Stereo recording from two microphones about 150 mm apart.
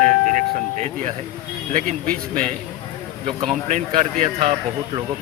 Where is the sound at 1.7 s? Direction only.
65° right (ahead or behind).